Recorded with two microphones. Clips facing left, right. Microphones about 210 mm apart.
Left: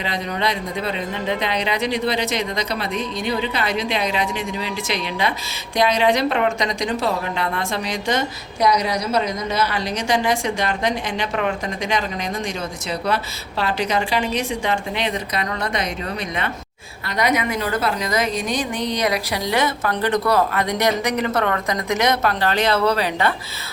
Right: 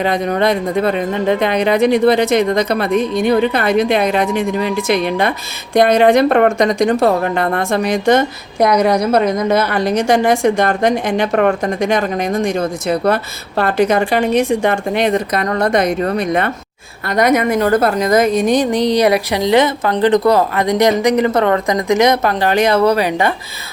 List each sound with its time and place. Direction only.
0.0 s a woman's voice: 50° right (ahead or behind); by 23.3 s 15° right (ahead or behind)